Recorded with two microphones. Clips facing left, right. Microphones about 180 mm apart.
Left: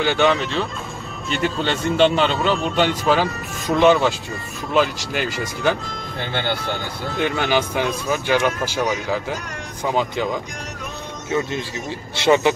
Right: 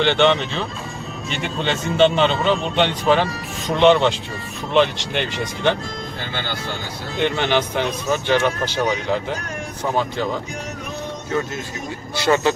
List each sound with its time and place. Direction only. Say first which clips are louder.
0.0 s speech: right 1 dB; 5° left (ahead or behind)
7.2 s speech: right 1 dB; 5° left (ahead or behind)
12.2 s speech: left 2 dB; 20° left (ahead or behind)